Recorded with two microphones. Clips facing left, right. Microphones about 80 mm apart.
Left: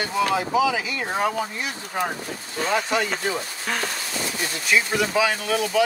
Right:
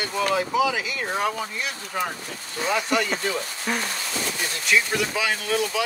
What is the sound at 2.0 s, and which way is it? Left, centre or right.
Speech, left.